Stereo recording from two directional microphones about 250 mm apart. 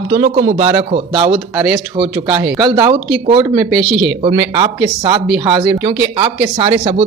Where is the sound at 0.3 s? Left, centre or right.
Right.